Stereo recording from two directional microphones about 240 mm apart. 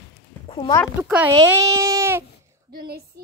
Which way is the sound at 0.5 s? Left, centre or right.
Centre.